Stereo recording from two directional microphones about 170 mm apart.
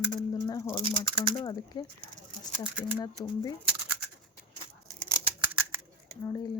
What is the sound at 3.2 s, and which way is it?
Speech, 25° left (ahead or behind).